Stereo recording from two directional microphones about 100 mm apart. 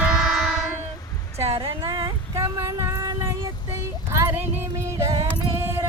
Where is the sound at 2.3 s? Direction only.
30° right (ahead or behind).